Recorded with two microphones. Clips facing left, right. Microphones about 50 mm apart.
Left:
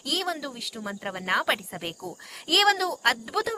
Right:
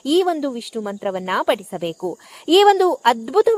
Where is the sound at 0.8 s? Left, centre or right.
Centre.